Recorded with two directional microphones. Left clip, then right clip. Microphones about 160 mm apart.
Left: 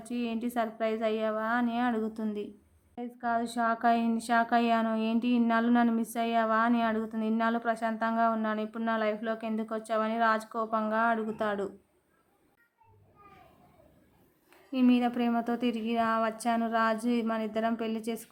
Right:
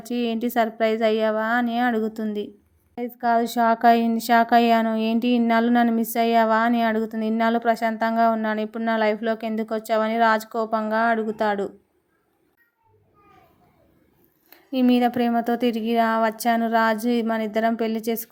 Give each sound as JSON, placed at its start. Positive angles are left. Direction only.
{"t": 0.0, "sound": "a woman's voice", "side_deg": -30}
{"t": 14.5, "sound": "a woman's voice", "side_deg": -30}